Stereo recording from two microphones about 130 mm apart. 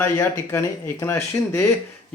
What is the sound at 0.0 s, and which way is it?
Speech, 15° left (ahead or behind).